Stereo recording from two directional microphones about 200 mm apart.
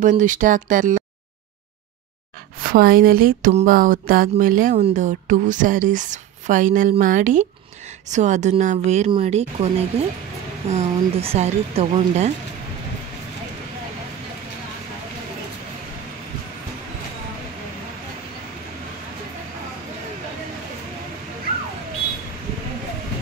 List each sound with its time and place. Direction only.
0.2 s speech: 40° right (ahead or behind)
2.6 s speech: 45° right (ahead or behind)